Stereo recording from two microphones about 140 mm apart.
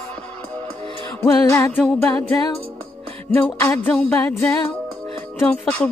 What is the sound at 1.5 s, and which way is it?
Music, 20° left (ahead or behind).